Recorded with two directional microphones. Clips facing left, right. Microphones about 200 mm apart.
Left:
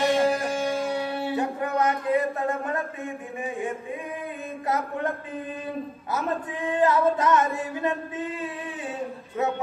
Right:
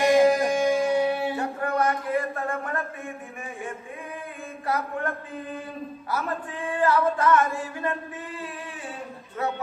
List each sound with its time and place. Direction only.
0.0 s music: 15° right (ahead or behind)
1.4 s a sound: 20° left (ahead or behind)
4.6 s singing: 20° left (ahead or behind)